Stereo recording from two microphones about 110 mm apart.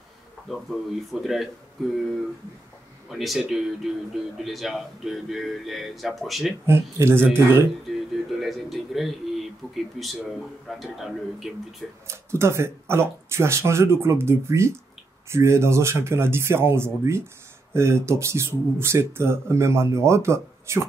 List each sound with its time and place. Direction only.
0.5 s speech: centre (ahead or behind)
3.1 s speech: centre (ahead or behind)
6.6 s speech: 25° right (ahead or behind)
7.9 s speech: centre (ahead or behind)
12.1 s speech: 25° right (ahead or behind)